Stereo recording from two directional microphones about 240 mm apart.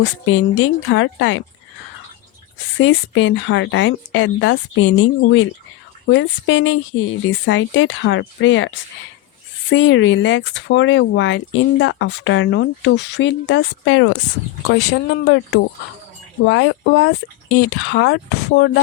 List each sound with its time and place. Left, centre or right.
0.3 s speech: left
2.7 s speech: left